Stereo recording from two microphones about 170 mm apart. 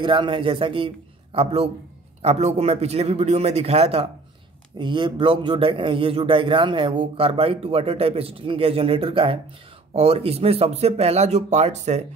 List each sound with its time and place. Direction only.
0.0 s a man's voice: 30° right (ahead or behind)